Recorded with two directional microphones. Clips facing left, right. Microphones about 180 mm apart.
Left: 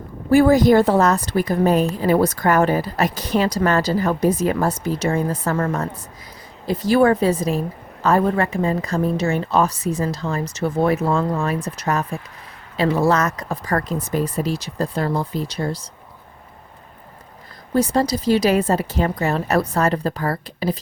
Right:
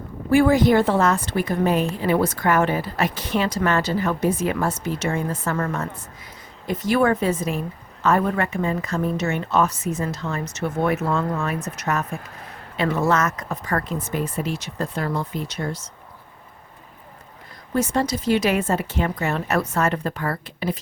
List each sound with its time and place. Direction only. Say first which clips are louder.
0.3 s a woman's voice: left 3 dB; 40° left (ahead or behind)
17.7 s a woman's voice: left 4 dB; 35° left (ahead or behind)